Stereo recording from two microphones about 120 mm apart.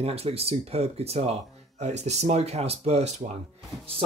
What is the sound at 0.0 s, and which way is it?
Speech, 55° right (ahead or behind).